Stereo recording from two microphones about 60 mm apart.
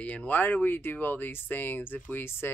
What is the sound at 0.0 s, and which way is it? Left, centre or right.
Speech, left.